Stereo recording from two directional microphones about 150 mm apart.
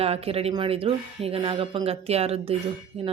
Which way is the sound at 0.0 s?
40° right (ahead or behind).